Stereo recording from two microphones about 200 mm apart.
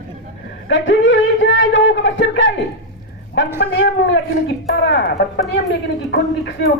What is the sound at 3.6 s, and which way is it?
Speech, 60° left (ahead or behind).